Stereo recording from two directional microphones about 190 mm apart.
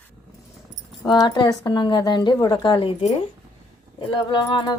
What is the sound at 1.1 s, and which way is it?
Speech, 20° left (ahead or behind).